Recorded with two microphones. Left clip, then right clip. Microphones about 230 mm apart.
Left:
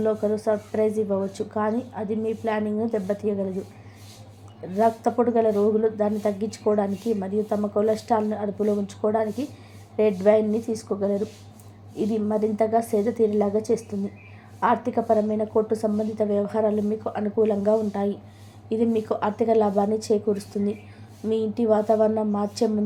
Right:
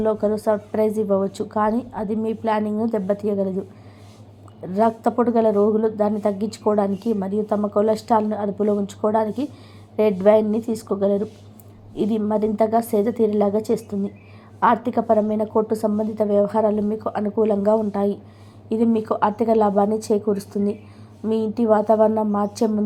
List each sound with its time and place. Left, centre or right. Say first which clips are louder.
0.0 s speech: right 3 dB; centre
4.7 s speech: right 2 dB; centre
14.6 s speech: right 4 dB; centre